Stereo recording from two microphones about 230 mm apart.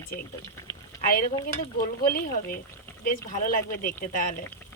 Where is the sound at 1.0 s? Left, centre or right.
Left.